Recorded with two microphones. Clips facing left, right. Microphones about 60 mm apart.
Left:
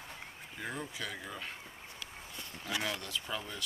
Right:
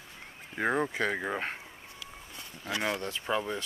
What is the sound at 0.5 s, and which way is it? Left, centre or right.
Speech, right.